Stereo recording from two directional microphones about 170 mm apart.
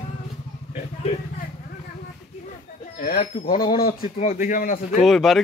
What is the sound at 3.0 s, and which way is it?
Speech, 60° left (ahead or behind).